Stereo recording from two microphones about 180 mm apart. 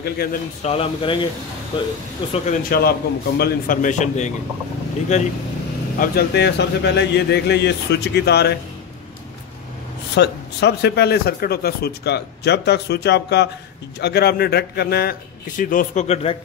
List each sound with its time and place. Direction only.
0.0 s a man's voice: 60° left (ahead or behind)
0.6 s speech: 35° left (ahead or behind)
2.7 s a man's voice: 60° left (ahead or behind); by 5.3 s 40° left (ahead or behind)
5.9 s speech: 65° left (ahead or behind)
10.1 s a man's voice: 70° left (ahead or behind); by 16.3 s 35° left (ahead or behind)